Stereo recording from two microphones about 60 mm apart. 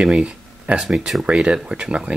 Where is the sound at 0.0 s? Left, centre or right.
Centre.